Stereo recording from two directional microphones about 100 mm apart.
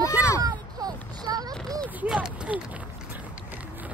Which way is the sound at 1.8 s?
15° right (ahead or behind).